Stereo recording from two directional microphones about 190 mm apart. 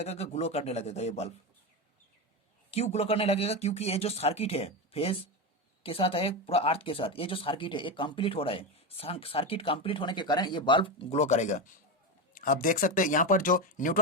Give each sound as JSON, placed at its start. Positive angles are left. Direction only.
{"t": 0.0, "sound": "speech", "side_deg": 35}
{"t": 2.6, "sound": "speech", "side_deg": 35}